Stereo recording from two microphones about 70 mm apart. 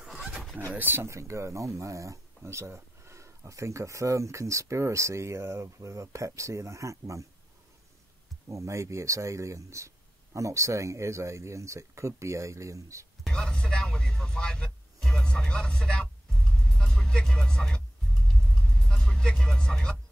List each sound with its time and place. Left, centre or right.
0.0 s a sound: centre
0.7 s speech: right
1.0 s speech: right
8.5 s speech: right
13.3 s music: centre